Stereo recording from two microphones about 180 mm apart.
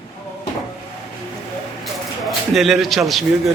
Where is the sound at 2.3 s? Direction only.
Centre (ahead or behind).